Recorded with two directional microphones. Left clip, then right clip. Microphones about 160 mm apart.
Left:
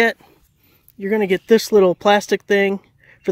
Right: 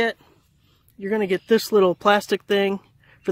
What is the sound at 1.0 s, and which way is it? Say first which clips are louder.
Speech: left 4 dB; 30° left (ahead or behind).